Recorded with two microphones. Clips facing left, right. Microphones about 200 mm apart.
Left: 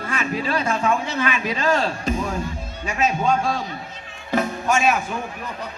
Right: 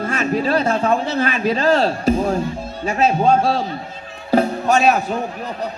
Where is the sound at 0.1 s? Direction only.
40° right (ahead or behind).